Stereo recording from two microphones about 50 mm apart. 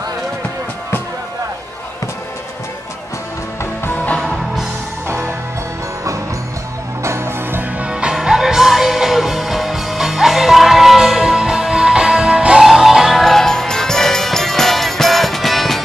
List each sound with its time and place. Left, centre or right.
5.0 s music: right
7.0 s music: right
7.8 s music: right
12.6 s music: centre